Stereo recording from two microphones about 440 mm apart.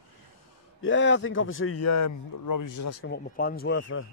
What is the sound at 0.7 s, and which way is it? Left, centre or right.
A man's voice, left.